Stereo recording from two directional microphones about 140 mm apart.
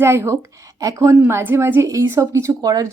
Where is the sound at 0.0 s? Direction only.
20° right (ahead or behind).